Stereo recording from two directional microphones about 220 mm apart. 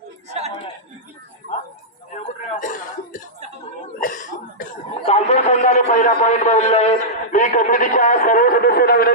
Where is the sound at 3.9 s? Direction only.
40° left (ahead or behind).